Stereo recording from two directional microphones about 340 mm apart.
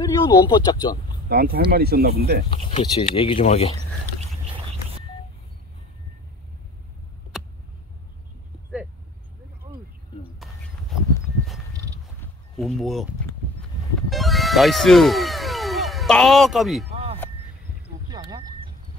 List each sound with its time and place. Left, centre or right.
0.0 s speech: centre
1.3 s speech: right
2.6 s speech: centre
11.1 s a sound: centre
12.5 s speech: centre
14.1 s music: centre
16.9 s a sound: centre